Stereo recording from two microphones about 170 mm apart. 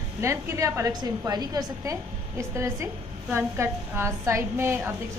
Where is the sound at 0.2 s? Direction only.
15° right (ahead or behind).